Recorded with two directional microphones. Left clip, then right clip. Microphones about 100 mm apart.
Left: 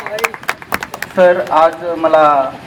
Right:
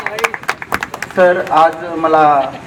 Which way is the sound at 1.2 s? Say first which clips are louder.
Even; 45° left (ahead or behind).